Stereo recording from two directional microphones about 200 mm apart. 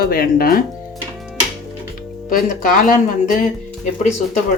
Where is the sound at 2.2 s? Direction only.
45° left (ahead or behind).